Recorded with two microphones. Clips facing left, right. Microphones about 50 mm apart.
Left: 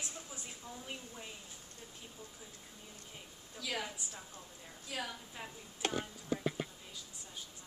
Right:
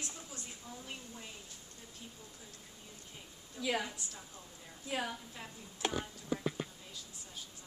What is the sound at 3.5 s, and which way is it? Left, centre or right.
Speech, centre.